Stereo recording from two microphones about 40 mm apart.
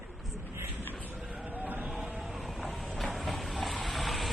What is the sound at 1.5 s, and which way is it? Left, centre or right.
Vehicle, right.